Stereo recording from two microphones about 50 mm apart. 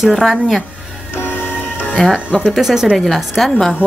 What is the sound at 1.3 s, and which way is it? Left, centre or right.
Music, left.